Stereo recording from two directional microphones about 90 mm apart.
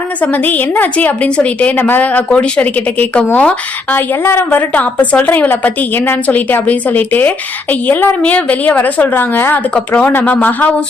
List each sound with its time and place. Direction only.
0.2 s a woman's voice: 15° left (ahead or behind)
3.9 s a woman's voice: 25° left (ahead or behind)